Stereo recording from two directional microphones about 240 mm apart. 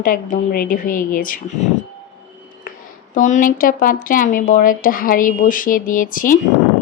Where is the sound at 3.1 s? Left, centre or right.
Left.